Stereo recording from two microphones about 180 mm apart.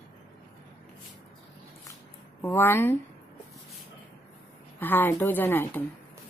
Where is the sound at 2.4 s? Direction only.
10° left (ahead or behind).